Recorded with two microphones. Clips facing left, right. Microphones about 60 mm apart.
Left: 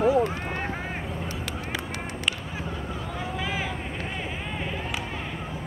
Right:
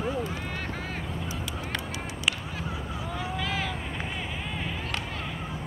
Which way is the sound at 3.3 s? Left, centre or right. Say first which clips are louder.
Left 1 dB; centre.